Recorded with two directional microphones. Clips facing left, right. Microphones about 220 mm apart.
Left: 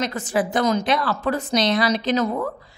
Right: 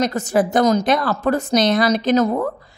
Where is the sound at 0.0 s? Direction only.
40° right (ahead or behind).